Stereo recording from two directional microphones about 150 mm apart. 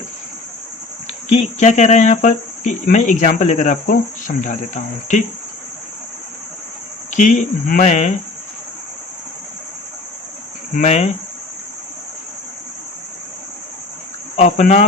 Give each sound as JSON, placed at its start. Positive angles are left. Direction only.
{"t": 1.3, "sound": "speech", "side_deg": 45}
{"t": 7.1, "sound": "speech", "side_deg": 55}
{"t": 10.8, "sound": "speech", "side_deg": 50}
{"t": 14.3, "sound": "speech", "side_deg": 50}